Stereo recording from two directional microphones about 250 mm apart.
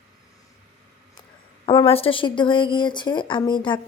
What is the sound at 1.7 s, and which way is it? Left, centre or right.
Speech, left.